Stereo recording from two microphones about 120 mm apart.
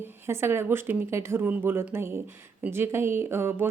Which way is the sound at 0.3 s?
20° right (ahead or behind).